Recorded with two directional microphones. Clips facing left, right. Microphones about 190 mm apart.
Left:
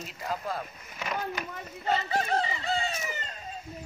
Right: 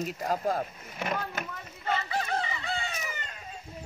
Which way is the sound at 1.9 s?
35° left (ahead or behind).